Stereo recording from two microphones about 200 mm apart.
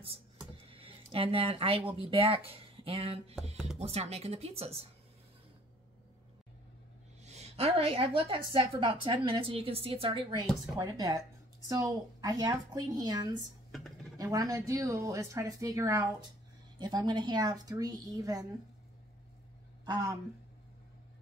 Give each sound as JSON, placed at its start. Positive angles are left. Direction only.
{"t": 0.6, "sound": "a sound", "side_deg": -25}
{"t": 2.0, "sound": "speech", "side_deg": -25}
{"t": 7.2, "sound": "a woman's voice", "side_deg": -30}
{"t": 13.7, "sound": "computer keyboard", "side_deg": 0}
{"t": 14.1, "sound": "a woman's voice", "side_deg": -15}
{"t": 19.8, "sound": "a sound", "side_deg": -20}